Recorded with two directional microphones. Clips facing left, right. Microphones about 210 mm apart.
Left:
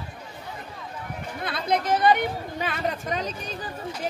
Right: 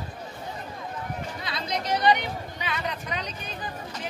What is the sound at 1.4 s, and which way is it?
Chatter, 55° left (ahead or behind).